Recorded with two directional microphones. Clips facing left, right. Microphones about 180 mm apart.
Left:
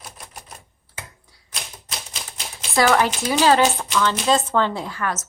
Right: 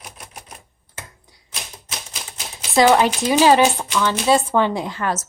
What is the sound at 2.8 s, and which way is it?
Speech, 20° right (ahead or behind).